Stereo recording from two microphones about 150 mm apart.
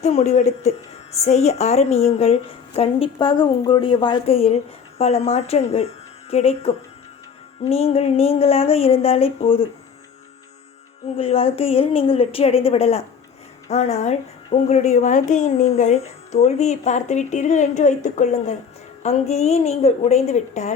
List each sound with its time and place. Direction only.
0.0 s a woman's voice: 45° left (ahead or behind)
11.2 s a woman's voice: 40° left (ahead or behind)